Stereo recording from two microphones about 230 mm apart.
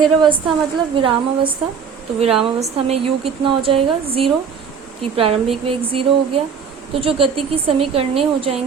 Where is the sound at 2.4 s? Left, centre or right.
Right.